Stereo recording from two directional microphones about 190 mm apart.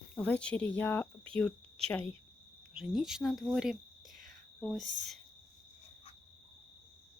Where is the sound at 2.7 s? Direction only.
5° right (ahead or behind).